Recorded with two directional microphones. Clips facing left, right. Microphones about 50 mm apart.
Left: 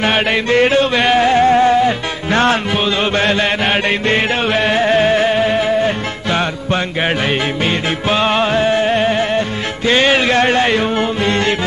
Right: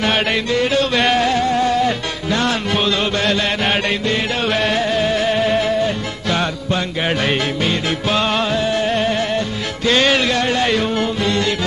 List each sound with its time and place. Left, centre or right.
0.0 s chant: centre
0.5 s music: left
0.9 s a sound: centre
1.4 s music: left
3.0 s chant: left
4.5 s music: left
4.8 s music: left
5.3 s music: centre
10.3 s music: left